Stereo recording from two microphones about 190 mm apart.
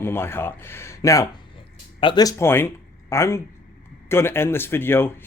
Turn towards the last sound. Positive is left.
turn(degrees=10)  # may be behind; listen again after turning